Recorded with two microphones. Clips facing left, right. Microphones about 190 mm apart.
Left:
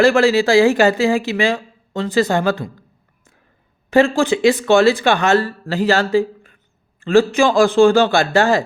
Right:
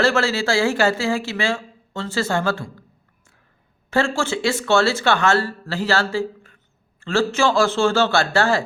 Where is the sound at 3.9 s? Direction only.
15° left (ahead or behind).